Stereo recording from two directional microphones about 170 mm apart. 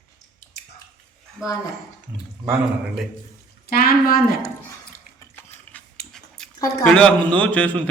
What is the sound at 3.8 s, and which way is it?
Speech, 60° left (ahead or behind).